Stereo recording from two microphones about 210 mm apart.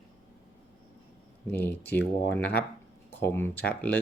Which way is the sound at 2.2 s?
50° left (ahead or behind).